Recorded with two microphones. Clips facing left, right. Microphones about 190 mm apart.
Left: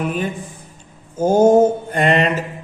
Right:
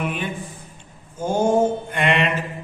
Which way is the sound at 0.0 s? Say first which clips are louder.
Left 4 dB; 40° left (ahead or behind).